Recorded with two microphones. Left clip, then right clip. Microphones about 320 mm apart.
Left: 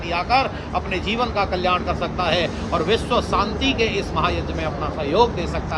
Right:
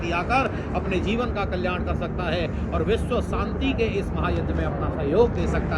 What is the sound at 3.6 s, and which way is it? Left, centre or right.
Speech, left.